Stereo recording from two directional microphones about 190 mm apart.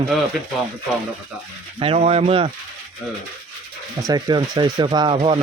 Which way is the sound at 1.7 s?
30° right (ahead or behind).